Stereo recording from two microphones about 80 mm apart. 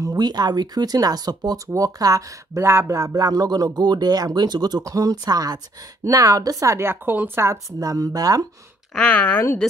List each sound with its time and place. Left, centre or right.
0.0 s speech: right
2.6 s speech: right
7.4 s speech: right
8.9 s speech: centre